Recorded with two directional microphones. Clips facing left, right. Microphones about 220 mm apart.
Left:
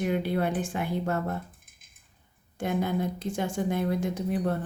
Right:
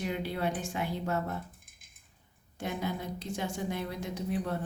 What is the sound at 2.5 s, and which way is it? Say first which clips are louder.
A woman's voice: left 7 dB; 50° left (ahead or behind).